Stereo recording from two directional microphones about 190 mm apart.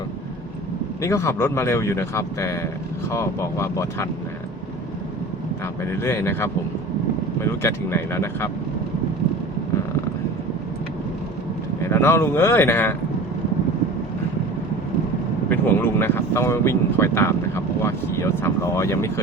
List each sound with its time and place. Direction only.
1.0 s speech: 15° left (ahead or behind)
5.8 s speech: 10° left (ahead or behind)
11.8 s speech: 15° left (ahead or behind)
15.4 s speech: 10° left (ahead or behind)